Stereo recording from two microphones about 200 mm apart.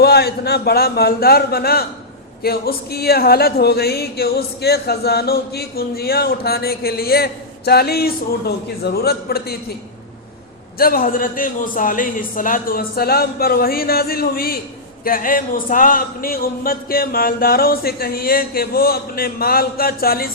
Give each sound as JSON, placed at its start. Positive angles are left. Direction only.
{"t": 0.0, "sound": "speech", "side_deg": 50}
{"t": 10.8, "sound": "speech", "side_deg": 45}